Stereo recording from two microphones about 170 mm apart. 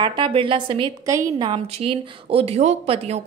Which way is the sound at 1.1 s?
20° right (ahead or behind).